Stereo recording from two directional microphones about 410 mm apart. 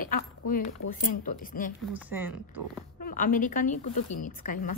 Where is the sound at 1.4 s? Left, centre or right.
Centre.